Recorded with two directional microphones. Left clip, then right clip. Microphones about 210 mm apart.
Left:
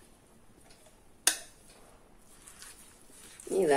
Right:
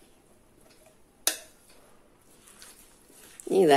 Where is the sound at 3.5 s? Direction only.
45° right (ahead or behind).